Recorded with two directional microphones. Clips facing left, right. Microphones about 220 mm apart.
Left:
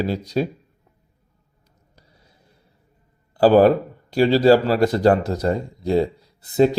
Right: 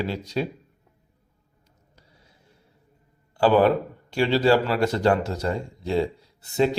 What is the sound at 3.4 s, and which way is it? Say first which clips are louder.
Speech: left 5 dB; 40° left (ahead or behind).